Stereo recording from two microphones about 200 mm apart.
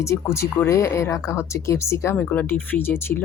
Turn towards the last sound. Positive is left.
turn(degrees=10)  # may be behind; listen again after turning